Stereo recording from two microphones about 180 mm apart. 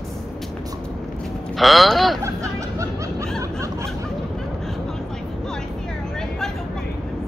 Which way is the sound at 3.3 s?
15° right (ahead or behind).